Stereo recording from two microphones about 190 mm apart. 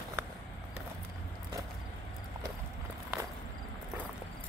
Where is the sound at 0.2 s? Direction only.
15° right (ahead or behind).